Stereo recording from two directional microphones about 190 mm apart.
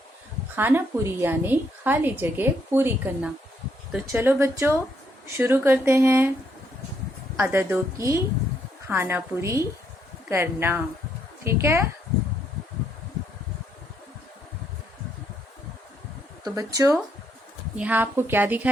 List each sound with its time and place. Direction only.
0.5 s a woman's voice: 10° right (ahead or behind)
7.3 s a woman's voice: 10° right (ahead or behind)
16.4 s a woman's voice: 20° right (ahead or behind)